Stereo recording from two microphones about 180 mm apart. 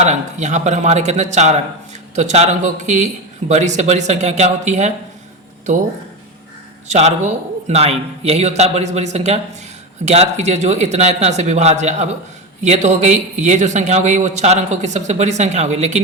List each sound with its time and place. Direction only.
0.0 s speech: 40° right (ahead or behind)
6.8 s speech: 40° right (ahead or behind)